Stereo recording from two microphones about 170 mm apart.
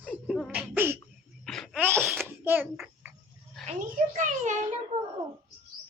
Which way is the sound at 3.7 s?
50° right (ahead or behind).